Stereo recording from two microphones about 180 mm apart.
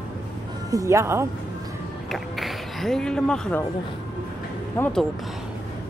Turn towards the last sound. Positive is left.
turn(degrees=5)  # may be behind; listen again after turning